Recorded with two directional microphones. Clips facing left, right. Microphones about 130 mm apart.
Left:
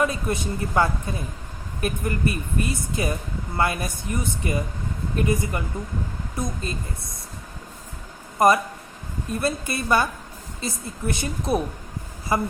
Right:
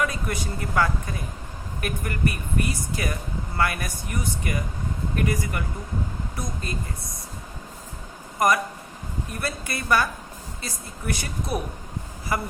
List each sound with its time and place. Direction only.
0.0 s speech: 25° left (ahead or behind)
8.4 s speech: 25° left (ahead or behind)